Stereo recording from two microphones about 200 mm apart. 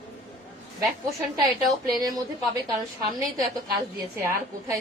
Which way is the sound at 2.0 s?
20° right (ahead or behind).